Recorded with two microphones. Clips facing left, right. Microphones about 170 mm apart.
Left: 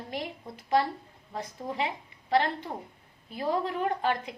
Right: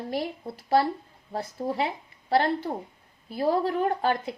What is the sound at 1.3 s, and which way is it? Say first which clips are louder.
Speech: right 6 dB; 40° right (ahead or behind).